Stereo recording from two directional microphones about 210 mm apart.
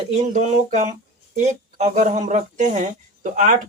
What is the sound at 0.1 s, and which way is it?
Speech, 35° right (ahead or behind).